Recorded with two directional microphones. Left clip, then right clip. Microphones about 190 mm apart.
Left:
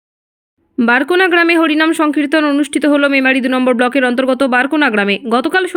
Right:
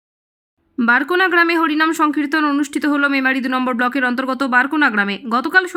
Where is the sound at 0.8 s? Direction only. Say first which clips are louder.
Left 3 dB; 15° left (ahead or behind).